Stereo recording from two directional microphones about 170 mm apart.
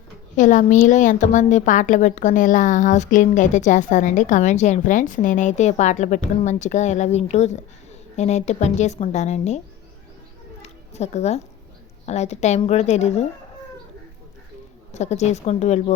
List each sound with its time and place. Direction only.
0.3 s a woman's voice: 50° left (ahead or behind)
10.6 s a sound: 40° left (ahead or behind)
12.0 s a woman's voice: 40° left (ahead or behind)
14.9 s a woman's voice: 40° left (ahead or behind)